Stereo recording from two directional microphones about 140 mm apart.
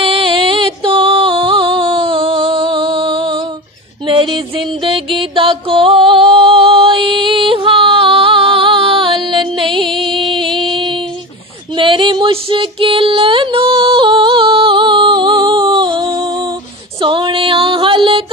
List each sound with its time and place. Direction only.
0.0 s music: 40° right (ahead or behind)
10.7 s female singing: 35° right (ahead or behind)
17.0 s music: 35° right (ahead or behind)